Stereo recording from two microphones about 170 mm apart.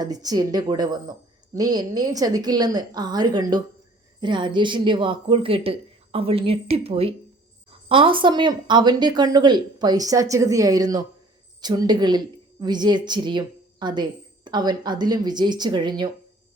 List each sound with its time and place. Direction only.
0.0 s a woman's voice: 20° right (ahead or behind)